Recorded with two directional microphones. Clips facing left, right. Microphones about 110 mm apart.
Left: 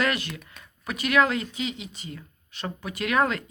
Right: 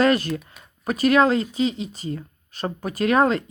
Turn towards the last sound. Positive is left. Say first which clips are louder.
# right 6 dB
turn(degrees=-30)  # may be behind; listen again after turning